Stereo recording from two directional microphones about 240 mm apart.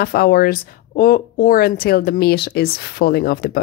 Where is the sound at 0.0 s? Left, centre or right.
Left.